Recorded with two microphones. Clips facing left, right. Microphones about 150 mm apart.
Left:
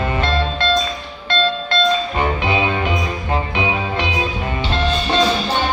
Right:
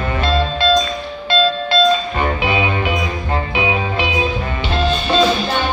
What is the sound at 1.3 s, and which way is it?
Music, 5° right (ahead or behind).